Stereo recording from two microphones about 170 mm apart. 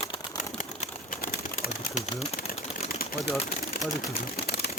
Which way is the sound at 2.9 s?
65° left (ahead or behind).